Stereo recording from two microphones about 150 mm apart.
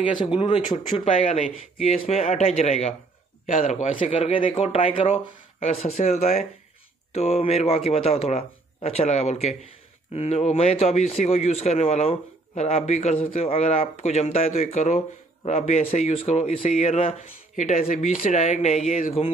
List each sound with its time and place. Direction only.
0.0 s speech: 35° left (ahead or behind); by 3.9 s 55° left (ahead or behind)
3.9 s speech: 35° left (ahead or behind)